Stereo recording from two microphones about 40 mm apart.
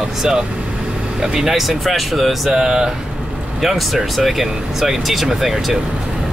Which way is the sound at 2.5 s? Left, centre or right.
Centre.